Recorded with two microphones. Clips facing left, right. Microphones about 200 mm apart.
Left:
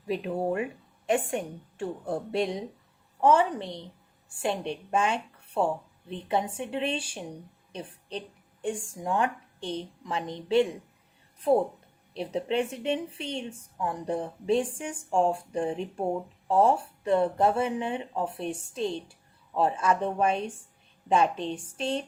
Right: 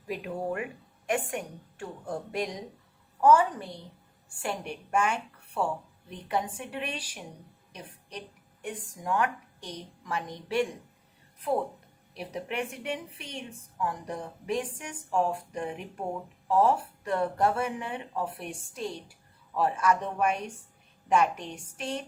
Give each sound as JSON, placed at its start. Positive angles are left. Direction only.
{"t": 0.1, "sound": "a woman's voice", "side_deg": 25}
{"t": 12.1, "sound": "a woman's voice", "side_deg": 25}